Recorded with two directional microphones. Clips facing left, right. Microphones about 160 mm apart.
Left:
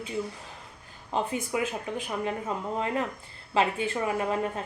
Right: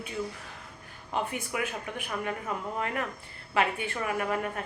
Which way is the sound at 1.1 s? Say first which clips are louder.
Left 3 dB; 25° left (ahead or behind).